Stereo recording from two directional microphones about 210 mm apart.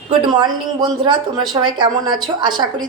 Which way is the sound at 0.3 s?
20° right (ahead or behind).